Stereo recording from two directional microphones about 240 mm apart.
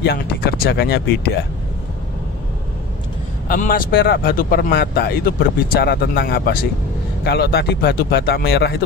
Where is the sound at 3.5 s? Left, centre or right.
Left.